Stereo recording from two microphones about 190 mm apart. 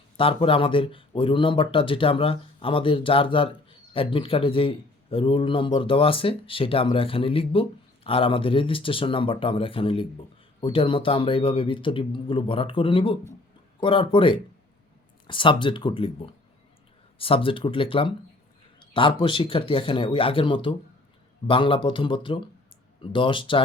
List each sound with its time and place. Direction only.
0.2 s speech: 30° left (ahead or behind)